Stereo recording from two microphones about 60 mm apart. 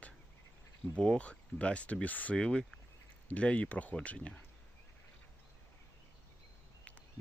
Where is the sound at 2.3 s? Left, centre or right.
Centre.